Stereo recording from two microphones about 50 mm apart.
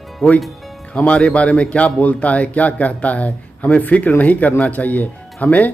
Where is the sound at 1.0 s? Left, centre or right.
Left.